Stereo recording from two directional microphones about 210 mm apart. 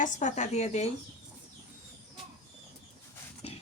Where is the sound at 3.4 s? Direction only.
30° left (ahead or behind).